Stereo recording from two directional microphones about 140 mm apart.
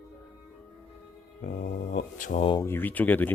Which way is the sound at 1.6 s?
80° left.